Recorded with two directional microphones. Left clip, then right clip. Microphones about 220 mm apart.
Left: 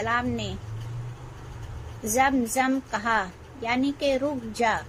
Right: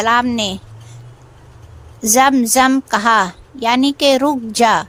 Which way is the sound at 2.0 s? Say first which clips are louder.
Right 11 dB; 50° right (ahead or behind).